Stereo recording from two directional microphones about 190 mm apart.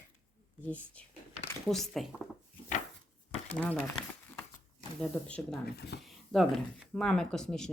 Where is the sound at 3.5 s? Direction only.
10° left (ahead or behind).